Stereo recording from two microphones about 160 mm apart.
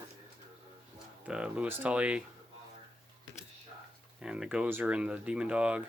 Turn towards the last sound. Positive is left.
turn(degrees=-5)  # may be behind; listen again after turning